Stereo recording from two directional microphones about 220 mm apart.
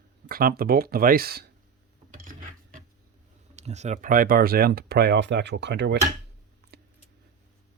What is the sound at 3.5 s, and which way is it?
Speech, 30° right (ahead or behind).